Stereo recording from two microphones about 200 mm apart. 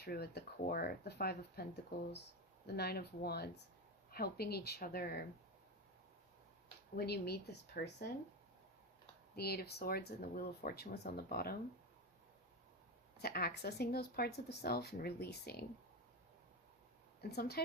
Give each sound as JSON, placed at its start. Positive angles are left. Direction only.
{"t": 0.0, "sound": "speech", "side_deg": 55}
{"t": 2.6, "sound": "speech", "side_deg": 50}
{"t": 6.9, "sound": "speech", "side_deg": 55}
{"t": 9.3, "sound": "speech", "side_deg": 50}
{"t": 13.1, "sound": "speech", "side_deg": 50}
{"t": 17.2, "sound": "a woman's voice", "side_deg": 55}